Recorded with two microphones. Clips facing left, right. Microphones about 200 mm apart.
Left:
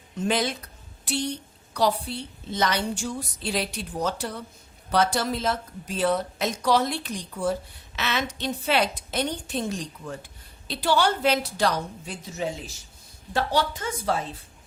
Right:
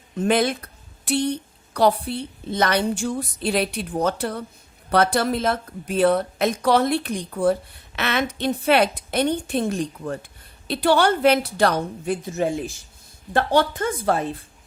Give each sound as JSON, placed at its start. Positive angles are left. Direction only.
{"t": 0.2, "sound": "a woman's voice", "side_deg": -55}